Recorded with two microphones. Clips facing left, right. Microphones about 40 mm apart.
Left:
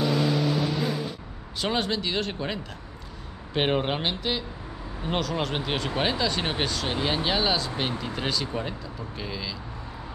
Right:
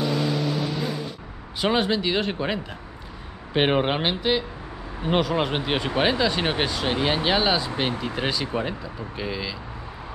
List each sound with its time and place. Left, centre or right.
0.0 s vehicle: centre
1.6 s speech: centre